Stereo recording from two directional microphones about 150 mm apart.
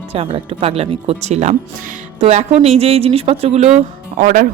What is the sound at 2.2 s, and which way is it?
Speech, 45° right (ahead or behind).